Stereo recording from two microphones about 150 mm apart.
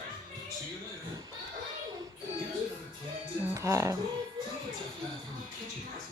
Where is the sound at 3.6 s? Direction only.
20° right (ahead or behind).